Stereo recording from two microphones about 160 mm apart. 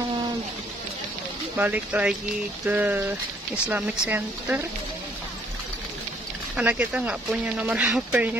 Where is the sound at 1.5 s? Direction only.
10° right (ahead or behind).